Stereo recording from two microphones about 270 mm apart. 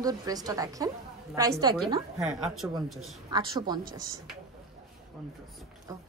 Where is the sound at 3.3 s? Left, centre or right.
Centre.